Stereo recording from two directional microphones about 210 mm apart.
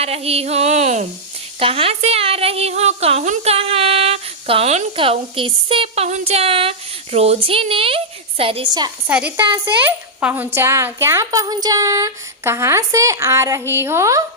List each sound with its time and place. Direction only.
0.0 s a sound: 30° right (ahead or behind)
1.5 s a woman's voice: 25° right (ahead or behind)
9.0 s a woman's voice: 5° right (ahead or behind)